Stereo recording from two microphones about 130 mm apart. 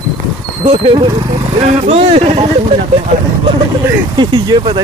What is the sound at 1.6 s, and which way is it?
Speech, 50° right (ahead or behind).